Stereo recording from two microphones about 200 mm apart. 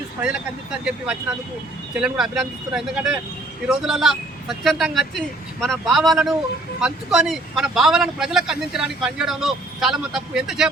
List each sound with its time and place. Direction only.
0.2 s speech: 5° right (ahead or behind)